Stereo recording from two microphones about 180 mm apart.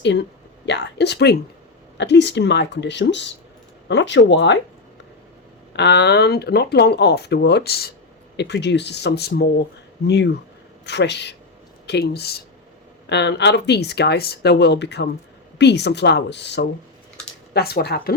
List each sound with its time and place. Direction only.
0.0 s speech: 75° left (ahead or behind)
5.7 s speech: 70° left (ahead or behind)
8.4 s speech: 75° left (ahead or behind)
17.5 s speech: 60° left (ahead or behind)